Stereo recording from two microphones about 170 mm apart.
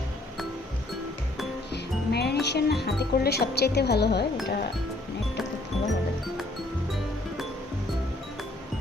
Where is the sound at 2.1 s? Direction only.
75° left (ahead or behind).